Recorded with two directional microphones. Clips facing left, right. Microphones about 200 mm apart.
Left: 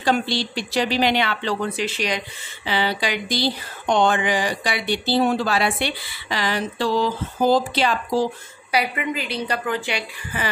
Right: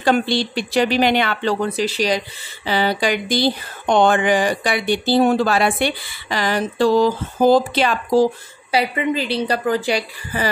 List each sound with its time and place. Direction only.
0.0 s speech: 55° right (ahead or behind)
8.7 s a woman's voice: 30° right (ahead or behind)